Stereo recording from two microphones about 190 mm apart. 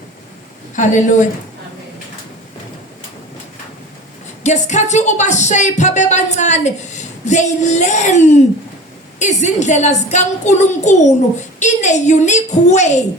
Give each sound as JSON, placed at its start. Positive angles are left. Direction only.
{"t": 0.8, "sound": "a woman's voice", "side_deg": 40}
{"t": 4.4, "sound": "a woman's voice", "side_deg": 40}